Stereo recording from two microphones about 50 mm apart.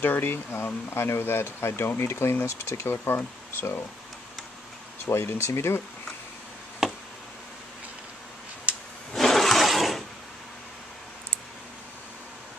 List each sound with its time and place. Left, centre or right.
0.0 s speech: left
5.0 s speech: left
9.1 s a sound: centre